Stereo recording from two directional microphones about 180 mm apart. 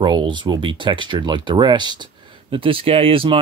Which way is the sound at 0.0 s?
25° right (ahead or behind).